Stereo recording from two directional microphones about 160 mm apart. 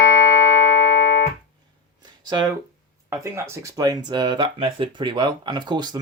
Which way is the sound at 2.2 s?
30° right (ahead or behind).